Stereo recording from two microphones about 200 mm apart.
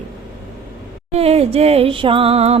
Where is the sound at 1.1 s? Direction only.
30° right (ahead or behind).